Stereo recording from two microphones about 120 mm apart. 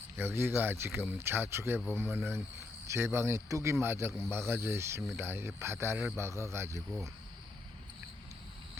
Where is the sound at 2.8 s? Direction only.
20° right (ahead or behind).